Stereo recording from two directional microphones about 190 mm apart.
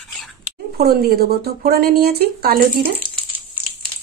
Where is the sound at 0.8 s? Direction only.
55° right (ahead or behind).